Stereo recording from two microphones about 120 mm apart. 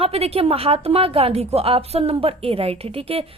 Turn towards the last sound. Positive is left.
turn(degrees=-50)  # may be behind; listen again after turning